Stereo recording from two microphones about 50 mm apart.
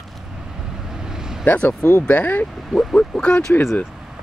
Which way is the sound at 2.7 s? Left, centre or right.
Centre.